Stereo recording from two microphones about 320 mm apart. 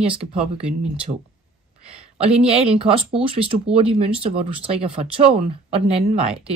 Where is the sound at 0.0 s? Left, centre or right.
Centre.